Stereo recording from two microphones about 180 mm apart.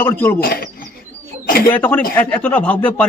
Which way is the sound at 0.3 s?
55° left (ahead or behind).